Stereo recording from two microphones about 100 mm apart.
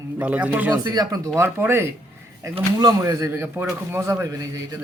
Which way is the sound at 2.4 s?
35° right (ahead or behind).